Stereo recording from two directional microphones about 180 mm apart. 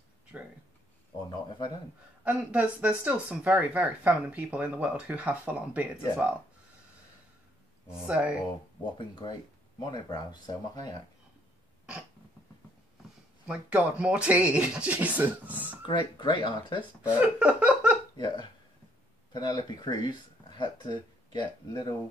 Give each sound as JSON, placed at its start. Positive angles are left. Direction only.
{"t": 1.3, "sound": "speech", "side_deg": 25}
{"t": 2.2, "sound": "speech", "side_deg": -5}
{"t": 8.0, "sound": "speech", "side_deg": -5}
{"t": 8.9, "sound": "speech", "side_deg": 25}
{"t": 13.5, "sound": "speech", "side_deg": -5}
{"t": 15.8, "sound": "speech", "side_deg": 25}
{"t": 17.2, "sound": "a sound", "side_deg": -10}
{"t": 18.1, "sound": "speech", "side_deg": 25}